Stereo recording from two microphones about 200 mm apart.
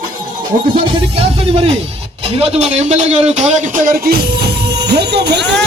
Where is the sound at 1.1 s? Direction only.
30° right (ahead or behind).